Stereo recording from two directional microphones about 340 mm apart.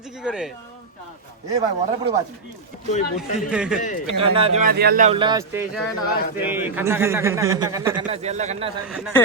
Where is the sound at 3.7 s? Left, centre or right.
Left.